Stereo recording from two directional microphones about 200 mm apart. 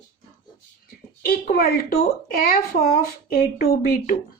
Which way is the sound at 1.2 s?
50° left (ahead or behind).